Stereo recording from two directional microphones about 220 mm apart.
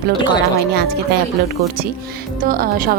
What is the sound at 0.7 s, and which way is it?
A woman's voice, 50° right (ahead or behind).